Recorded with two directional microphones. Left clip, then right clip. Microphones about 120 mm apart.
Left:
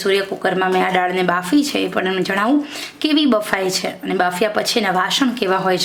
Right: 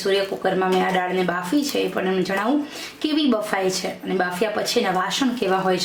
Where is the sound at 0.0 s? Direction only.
40° left (ahead or behind).